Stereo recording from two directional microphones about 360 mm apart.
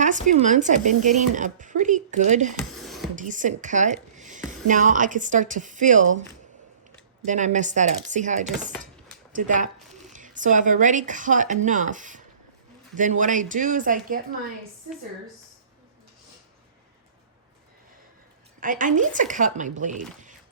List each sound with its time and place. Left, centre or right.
0.0 s speech: right
2.6 s music: centre
3.2 s speech: right
7.3 s speech: centre
18.6 s speech: right